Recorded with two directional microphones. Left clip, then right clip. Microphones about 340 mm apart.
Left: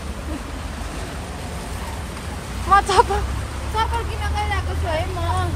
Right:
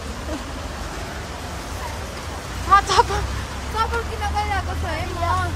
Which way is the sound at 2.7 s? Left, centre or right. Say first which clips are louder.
Even; centre.